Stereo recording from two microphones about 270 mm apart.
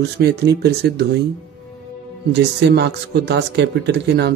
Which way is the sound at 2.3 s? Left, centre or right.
Right.